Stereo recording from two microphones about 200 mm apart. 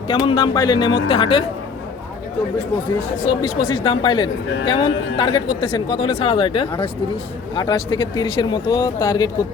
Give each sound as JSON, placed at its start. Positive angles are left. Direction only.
{"t": 0.1, "sound": "a woman's voice", "side_deg": 25}
{"t": 3.2, "sound": "a woman's voice", "side_deg": 25}